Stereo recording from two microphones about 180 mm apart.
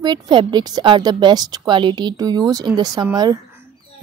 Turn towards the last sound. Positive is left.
turn(degrees=-20)  # may be behind; listen again after turning